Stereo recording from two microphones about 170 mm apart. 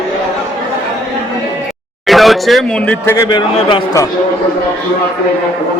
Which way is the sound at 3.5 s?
30° left (ahead or behind).